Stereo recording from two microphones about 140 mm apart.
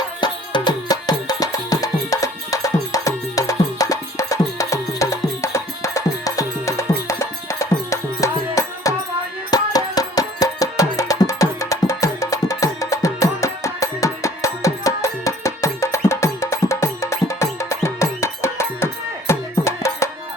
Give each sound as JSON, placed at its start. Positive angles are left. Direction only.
{"t": 0.2, "sound": "music", "side_deg": 30}